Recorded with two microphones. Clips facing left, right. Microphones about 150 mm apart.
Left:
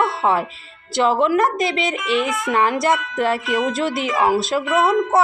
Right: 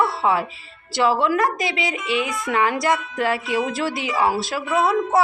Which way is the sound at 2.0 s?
90° left.